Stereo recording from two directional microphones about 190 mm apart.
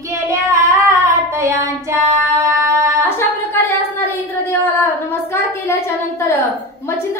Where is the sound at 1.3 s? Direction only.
15° right (ahead or behind).